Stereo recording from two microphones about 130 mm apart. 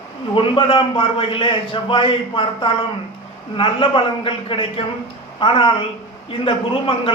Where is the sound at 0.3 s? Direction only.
40° left (ahead or behind).